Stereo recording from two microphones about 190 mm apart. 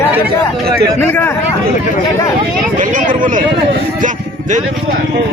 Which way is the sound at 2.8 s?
45° right (ahead or behind).